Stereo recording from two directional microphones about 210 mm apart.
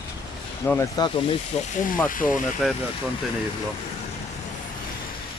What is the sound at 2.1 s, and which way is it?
Speech, 40° left (ahead or behind).